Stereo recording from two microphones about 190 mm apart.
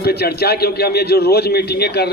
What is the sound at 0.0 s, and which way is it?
A man's voice, 55° left (ahead or behind).